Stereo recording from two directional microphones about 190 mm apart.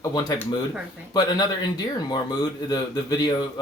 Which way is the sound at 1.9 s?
20° left (ahead or behind).